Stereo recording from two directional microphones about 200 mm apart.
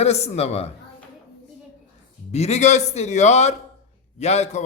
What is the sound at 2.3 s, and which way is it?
A man's voice, 35° left (ahead or behind).